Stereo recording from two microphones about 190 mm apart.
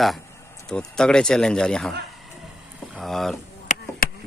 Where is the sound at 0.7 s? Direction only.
5° left (ahead or behind).